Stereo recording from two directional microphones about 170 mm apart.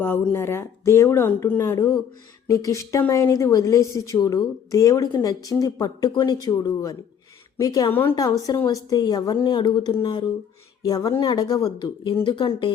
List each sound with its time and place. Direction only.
0.0 s speech: 10° left (ahead or behind)
1.7 s a woman's voice: 20° left (ahead or behind)